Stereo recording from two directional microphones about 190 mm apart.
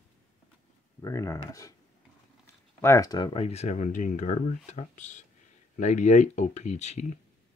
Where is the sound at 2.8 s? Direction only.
15° left (ahead or behind).